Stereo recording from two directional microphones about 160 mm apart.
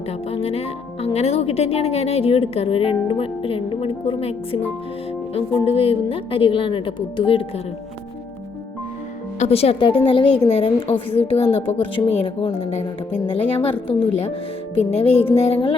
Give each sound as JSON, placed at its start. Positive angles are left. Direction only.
{"t": 0.3, "sound": "speech", "side_deg": 40}
{"t": 9.4, "sound": "speech", "side_deg": 40}